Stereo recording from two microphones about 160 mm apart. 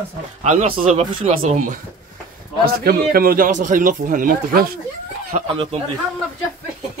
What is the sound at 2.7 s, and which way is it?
Speech, 70° right (ahead or behind).